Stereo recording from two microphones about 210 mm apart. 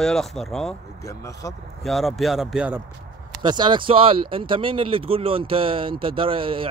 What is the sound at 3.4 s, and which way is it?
Speech, 20° right (ahead or behind).